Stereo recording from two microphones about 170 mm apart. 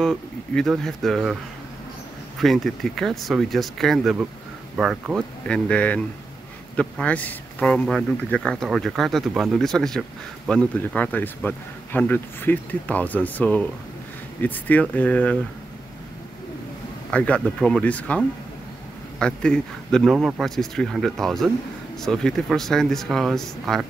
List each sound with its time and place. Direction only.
0.0 s speech: centre (ahead or behind)
2.4 s speech: centre (ahead or behind)
17.1 s speech: 5° left (ahead or behind)